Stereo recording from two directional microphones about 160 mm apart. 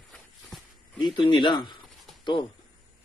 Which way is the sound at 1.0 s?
30° left (ahead or behind).